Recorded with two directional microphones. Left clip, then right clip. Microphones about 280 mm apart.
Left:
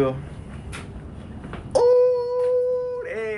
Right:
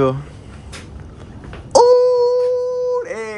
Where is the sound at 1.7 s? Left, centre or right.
Right.